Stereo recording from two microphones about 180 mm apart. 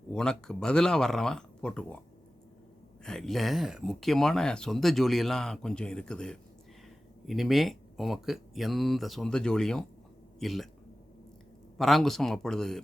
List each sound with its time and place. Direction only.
0.1 s speech: 5° left (ahead or behind)
3.0 s speech: 5° left (ahead or behind)
11.8 s speech: centre (ahead or behind)